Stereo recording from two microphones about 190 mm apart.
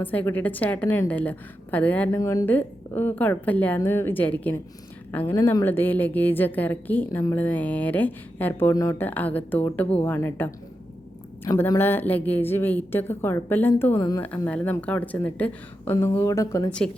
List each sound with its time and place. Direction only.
0.0 s a woman's voice: 10° left (ahead or behind)